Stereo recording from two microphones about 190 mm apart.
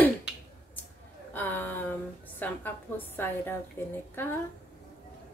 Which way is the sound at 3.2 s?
10° left (ahead or behind).